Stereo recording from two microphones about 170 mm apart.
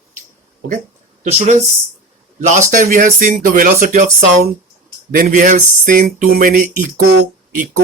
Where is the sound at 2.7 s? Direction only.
55° right (ahead or behind).